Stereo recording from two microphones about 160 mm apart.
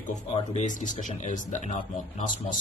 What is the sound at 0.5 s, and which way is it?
A man's voice, 50° left (ahead or behind).